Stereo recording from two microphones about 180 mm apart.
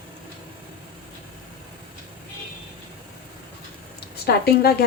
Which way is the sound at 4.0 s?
60° left (ahead or behind).